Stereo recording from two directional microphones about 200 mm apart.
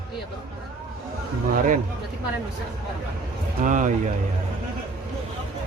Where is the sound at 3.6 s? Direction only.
40° right (ahead or behind).